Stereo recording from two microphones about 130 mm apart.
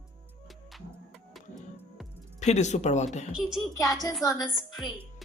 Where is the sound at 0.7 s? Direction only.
Centre (ahead or behind).